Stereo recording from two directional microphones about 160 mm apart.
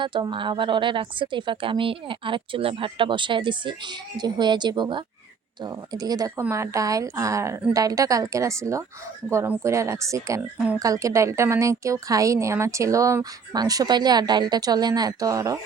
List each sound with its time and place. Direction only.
0.0 s a woman's voice: 30° right (ahead or behind)